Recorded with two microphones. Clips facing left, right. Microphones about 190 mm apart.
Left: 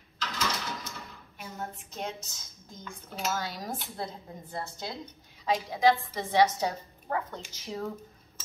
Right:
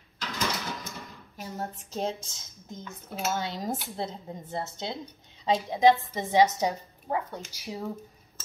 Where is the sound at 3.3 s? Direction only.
25° right (ahead or behind).